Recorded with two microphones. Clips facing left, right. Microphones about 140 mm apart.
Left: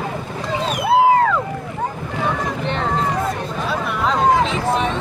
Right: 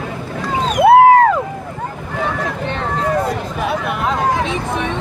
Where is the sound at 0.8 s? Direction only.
55° right (ahead or behind).